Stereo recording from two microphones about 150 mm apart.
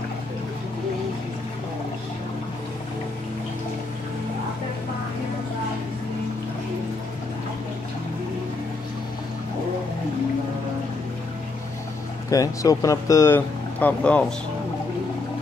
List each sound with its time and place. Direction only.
12.3 s speech: 20° left (ahead or behind)